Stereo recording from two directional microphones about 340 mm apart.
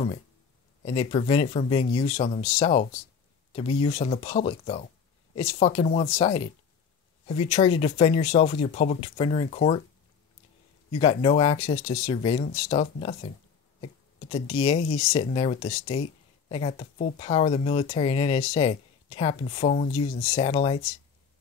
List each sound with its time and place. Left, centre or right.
0.8 s speech: centre
11.0 s speech: centre
14.3 s speech: centre